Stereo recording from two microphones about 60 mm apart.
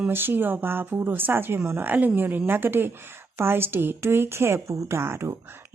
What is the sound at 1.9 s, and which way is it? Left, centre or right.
A woman's voice, right.